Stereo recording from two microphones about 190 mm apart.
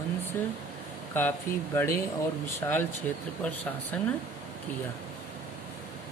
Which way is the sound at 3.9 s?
5° left (ahead or behind).